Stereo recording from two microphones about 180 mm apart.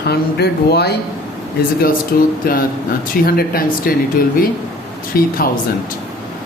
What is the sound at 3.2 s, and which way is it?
Speech, 55° left (ahead or behind).